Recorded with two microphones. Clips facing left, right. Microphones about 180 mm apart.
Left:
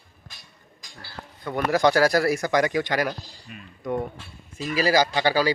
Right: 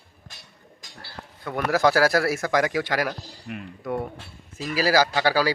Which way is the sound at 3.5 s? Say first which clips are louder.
Right 11 dB; 65° right (ahead or behind).